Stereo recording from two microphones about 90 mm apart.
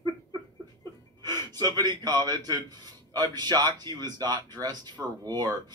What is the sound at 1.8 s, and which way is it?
Speech, 45° right (ahead or behind).